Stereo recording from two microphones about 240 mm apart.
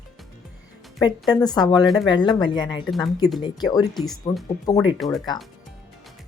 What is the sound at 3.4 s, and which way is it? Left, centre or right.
Speech, centre.